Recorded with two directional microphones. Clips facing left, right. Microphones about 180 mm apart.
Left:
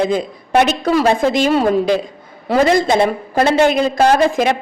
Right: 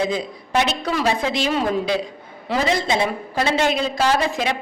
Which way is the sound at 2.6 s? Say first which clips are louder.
Left 7 dB; 50° left (ahead or behind).